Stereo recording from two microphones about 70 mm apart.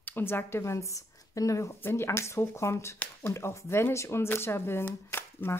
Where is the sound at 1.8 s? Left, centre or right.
Left.